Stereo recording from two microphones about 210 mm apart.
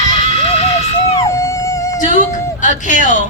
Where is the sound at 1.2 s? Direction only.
15° left (ahead or behind).